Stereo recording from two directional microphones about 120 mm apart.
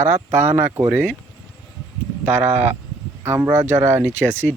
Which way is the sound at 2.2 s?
15° right (ahead or behind).